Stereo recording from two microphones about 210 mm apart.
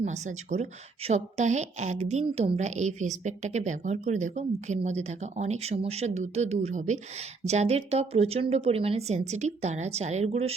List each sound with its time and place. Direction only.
0.0 s speech: 35° right (ahead or behind)